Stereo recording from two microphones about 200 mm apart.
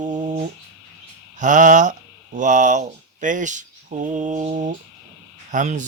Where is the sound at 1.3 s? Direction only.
40° right (ahead or behind).